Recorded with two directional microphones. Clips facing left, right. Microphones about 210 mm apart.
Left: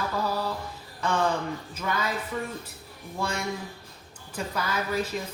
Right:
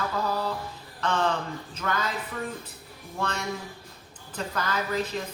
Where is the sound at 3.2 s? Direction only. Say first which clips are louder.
Left 1 dB; 10° left (ahead or behind).